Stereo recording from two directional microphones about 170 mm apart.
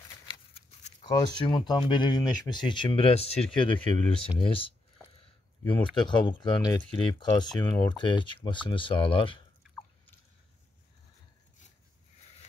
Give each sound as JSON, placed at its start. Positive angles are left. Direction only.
{"t": 0.3, "sound": "a sound", "side_deg": 30}
{"t": 1.4, "sound": "speech", "side_deg": 25}
{"t": 6.0, "sound": "speech", "side_deg": 30}